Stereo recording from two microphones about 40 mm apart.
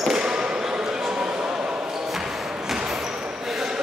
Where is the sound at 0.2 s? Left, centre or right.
Centre.